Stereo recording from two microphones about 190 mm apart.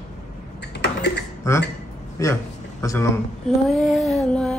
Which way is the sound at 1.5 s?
15° left (ahead or behind).